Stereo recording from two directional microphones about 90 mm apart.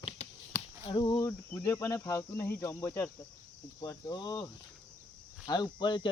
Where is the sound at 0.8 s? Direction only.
65° left (ahead or behind).